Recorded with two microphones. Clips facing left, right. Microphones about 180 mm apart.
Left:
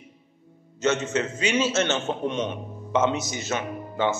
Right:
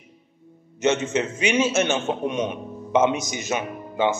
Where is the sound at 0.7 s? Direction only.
15° right (ahead or behind).